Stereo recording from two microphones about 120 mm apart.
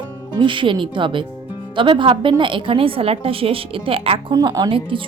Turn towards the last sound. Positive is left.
turn(degrees=-40)  # may be behind; listen again after turning